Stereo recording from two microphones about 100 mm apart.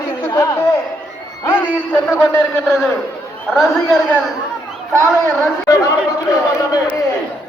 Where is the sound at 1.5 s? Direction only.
20° left (ahead or behind).